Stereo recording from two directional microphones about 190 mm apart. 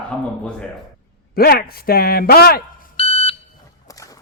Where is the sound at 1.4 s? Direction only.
50° left (ahead or behind).